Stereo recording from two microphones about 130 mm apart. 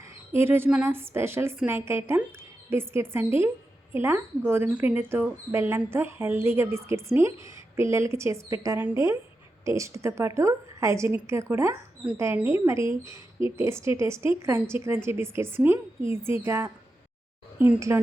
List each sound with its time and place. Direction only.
0.3 s speech: 15° right (ahead or behind)